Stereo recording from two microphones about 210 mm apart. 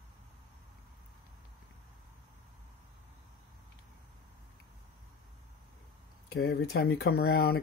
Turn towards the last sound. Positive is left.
turn(degrees=50)  # may be behind; listen again after turning